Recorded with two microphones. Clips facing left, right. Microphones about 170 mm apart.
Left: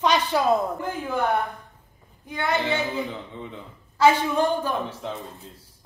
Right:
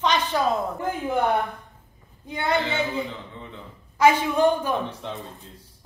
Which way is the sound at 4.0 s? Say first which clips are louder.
Right 1 dB; 15° right (ahead or behind).